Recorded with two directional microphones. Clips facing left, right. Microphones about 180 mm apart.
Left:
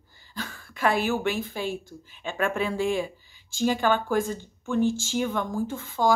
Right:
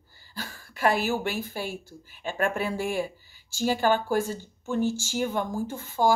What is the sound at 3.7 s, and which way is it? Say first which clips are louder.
Speech: right 1 dB; 40° right (ahead or behind).